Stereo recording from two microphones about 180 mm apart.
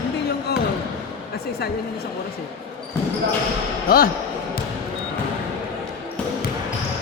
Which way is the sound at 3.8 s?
55° left (ahead or behind).